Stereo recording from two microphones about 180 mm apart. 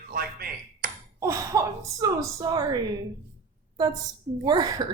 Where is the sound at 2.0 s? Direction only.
20° right (ahead or behind).